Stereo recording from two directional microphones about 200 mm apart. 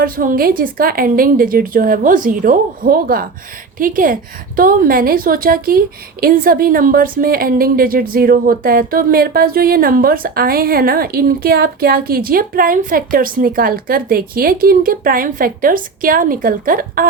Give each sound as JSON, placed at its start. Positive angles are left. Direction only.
{"t": 0.0, "sound": "a woman's voice", "side_deg": -45}